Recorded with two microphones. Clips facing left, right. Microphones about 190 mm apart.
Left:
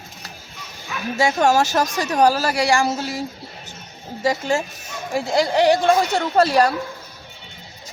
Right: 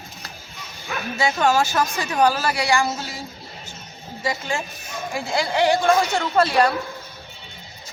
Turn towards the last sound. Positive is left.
turn(degrees=40)  # may be behind; listen again after turning